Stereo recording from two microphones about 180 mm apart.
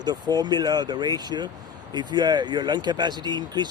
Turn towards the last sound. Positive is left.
turn(degrees=-25)  # may be behind; listen again after turning